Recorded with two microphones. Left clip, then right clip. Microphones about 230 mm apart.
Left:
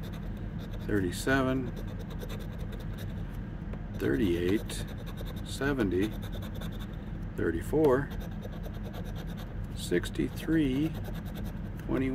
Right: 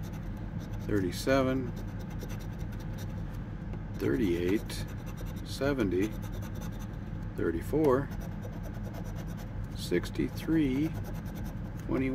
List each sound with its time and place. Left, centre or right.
0.8 s speech: centre
4.0 s speech: centre
5.6 s speech: centre
7.4 s speech: centre
9.8 s speech: centre
11.9 s speech: centre